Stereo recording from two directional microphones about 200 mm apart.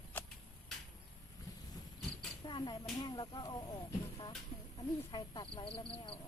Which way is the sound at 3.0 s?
20° left (ahead or behind).